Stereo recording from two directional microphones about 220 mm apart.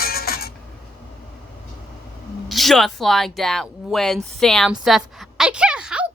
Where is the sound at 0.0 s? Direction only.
45° left (ahead or behind).